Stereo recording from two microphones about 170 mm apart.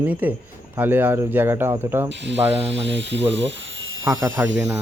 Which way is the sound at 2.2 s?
90° right.